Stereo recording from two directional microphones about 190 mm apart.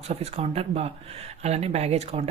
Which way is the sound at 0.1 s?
35° right (ahead or behind).